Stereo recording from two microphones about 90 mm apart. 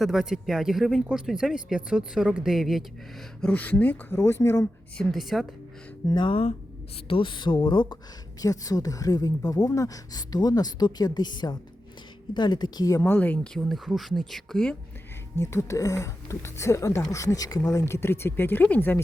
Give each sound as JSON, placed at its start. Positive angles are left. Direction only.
{"t": 0.0, "sound": "speech", "side_deg": -5}
{"t": 3.4, "sound": "speech", "side_deg": 20}
{"t": 5.1, "sound": "speech", "side_deg": 0}
{"t": 6.1, "sound": "speech", "side_deg": 65}
{"t": 8.4, "sound": "speech", "side_deg": 45}
{"t": 13.0, "sound": "speech", "side_deg": 20}
{"t": 13.6, "sound": "speech", "side_deg": 0}
{"t": 15.4, "sound": "speech", "side_deg": 30}